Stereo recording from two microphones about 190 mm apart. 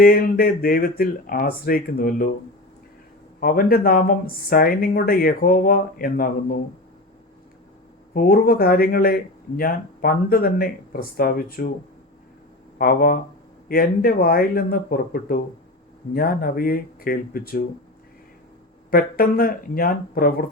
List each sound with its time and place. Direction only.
0.0 s speech: 50° left (ahead or behind)
3.4 s speech: 50° left (ahead or behind)
8.1 s speech: 50° left (ahead or behind)
12.8 s speech: 50° left (ahead or behind)
18.9 s speech: 50° left (ahead or behind)